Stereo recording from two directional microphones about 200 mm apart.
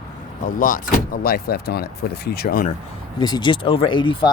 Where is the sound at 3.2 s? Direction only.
20° left (ahead or behind).